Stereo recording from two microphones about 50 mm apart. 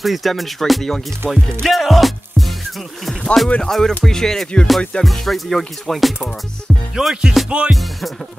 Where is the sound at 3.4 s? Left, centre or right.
Centre.